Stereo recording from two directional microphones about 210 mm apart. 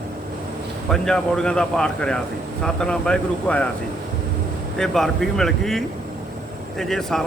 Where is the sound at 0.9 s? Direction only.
5° left (ahead or behind).